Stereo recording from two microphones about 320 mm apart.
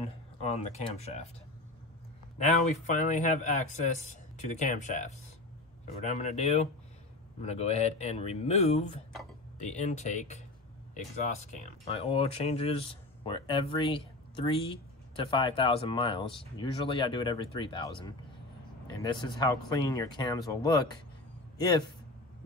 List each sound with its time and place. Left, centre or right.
0.0 s speech: centre
2.3 s a man's voice: left